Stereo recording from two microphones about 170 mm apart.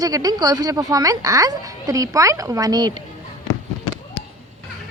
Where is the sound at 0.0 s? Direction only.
20° right (ahead or behind).